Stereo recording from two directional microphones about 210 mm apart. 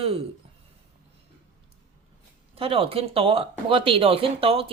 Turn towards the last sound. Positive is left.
turn(degrees=-25)  # may be behind; listen again after turning